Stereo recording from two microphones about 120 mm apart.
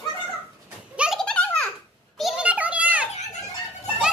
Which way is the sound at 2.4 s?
10° right (ahead or behind).